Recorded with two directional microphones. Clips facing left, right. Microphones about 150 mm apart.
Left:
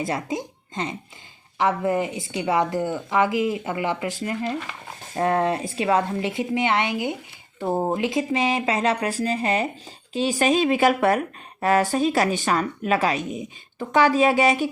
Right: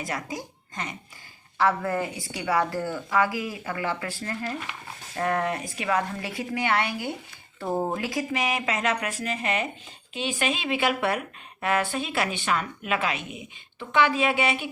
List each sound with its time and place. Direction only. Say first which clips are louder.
0.0 s a woman's voice: left 6 dB; 25° left (ahead or behind)
5.1 s a woman's voice: left 5 dB; 30° left (ahead or behind)